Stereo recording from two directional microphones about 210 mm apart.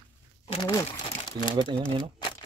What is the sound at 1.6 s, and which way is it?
Speech, 25° right (ahead or behind).